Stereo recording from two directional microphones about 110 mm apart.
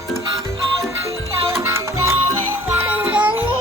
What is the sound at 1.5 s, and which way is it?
Music, 25° right (ahead or behind).